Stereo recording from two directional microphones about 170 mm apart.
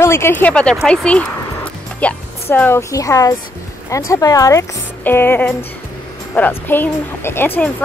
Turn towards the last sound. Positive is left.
turn(degrees=10)  # may be behind; listen again after turning